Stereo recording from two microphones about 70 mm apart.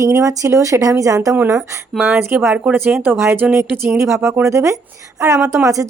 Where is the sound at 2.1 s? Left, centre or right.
Right.